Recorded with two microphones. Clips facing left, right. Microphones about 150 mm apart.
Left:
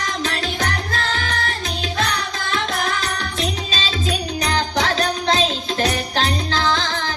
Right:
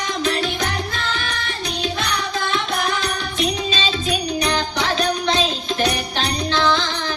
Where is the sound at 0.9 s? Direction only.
35° left (ahead or behind).